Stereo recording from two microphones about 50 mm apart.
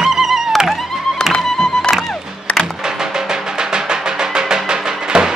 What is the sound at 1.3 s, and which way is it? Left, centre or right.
Music, centre.